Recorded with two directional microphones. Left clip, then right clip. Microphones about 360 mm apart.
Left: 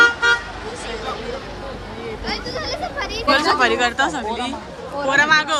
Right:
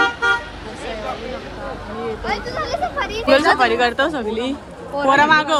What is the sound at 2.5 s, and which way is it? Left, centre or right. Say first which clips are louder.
Speech: right 3 dB; centre.